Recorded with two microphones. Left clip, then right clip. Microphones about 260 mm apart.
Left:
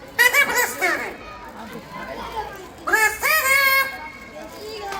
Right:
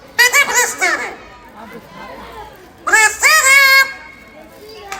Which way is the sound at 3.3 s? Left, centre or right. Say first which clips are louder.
Right 9 dB; right.